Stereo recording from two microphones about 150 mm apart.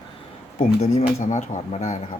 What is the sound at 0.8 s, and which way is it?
Speech, 50° left (ahead or behind).